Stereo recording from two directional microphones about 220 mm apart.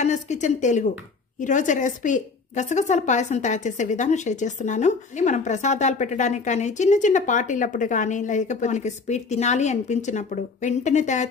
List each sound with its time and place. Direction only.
0.0 s a woman's voice: 30° left (ahead or behind)